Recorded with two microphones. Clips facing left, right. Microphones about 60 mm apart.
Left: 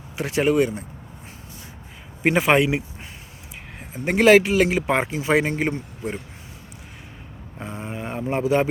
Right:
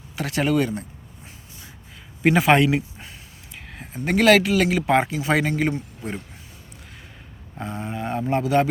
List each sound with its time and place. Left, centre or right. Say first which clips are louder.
0.2 s speech: left 2 dB; centre
2.2 s speech: right 1 dB; left
3.8 s a sound: left 1 dB; centre
4.1 s speech: left 2 dB; left
7.6 s speech: right 2 dB; centre